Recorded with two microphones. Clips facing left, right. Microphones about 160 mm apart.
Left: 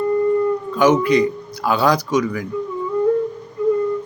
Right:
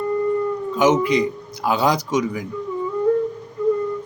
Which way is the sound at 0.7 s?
20° right (ahead or behind).